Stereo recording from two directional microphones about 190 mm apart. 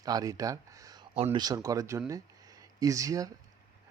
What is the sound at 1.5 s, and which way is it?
Speech, 15° right (ahead or behind).